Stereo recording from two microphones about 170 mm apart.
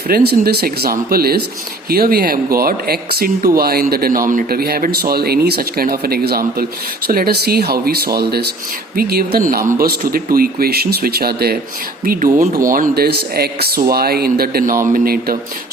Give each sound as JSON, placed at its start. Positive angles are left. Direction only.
{"t": 0.1, "sound": "speech", "side_deg": -65}
{"t": 12.0, "sound": "speech", "side_deg": -55}